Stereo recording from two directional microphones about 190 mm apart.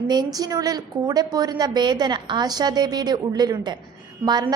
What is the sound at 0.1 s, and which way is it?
A woman's voice, 20° right (ahead or behind).